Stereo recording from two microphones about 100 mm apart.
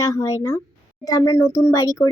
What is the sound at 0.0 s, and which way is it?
Speech, 35° left (ahead or behind).